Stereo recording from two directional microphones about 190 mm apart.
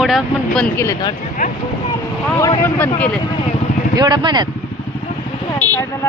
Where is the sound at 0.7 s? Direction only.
15° left (ahead or behind).